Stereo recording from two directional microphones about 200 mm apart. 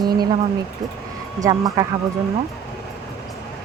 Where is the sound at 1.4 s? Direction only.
20° right (ahead or behind).